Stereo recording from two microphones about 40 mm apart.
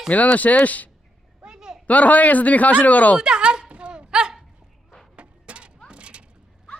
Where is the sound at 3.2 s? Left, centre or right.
Centre.